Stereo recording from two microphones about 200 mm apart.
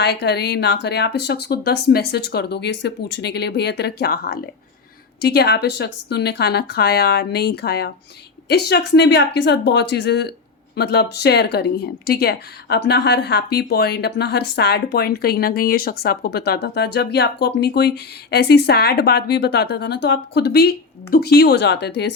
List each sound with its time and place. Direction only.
0.0 s speech: 55° left (ahead or behind)